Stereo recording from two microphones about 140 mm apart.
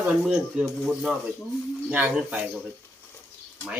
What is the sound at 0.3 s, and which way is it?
Speech, centre (ahead or behind).